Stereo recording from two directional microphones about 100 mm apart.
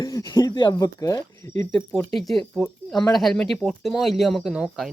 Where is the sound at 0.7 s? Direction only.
35° left (ahead or behind).